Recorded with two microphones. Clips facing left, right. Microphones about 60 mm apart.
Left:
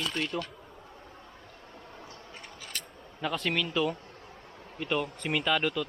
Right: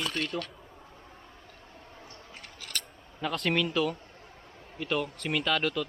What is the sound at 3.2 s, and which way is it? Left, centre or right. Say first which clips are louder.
Speech: right 2 dB; centre.